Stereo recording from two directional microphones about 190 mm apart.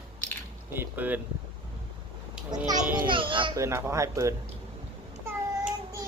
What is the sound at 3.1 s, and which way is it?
Children playing, 25° right (ahead or behind).